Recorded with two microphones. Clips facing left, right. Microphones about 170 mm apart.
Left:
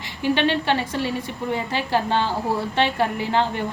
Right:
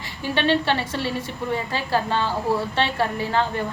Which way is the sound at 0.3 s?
15° left (ahead or behind).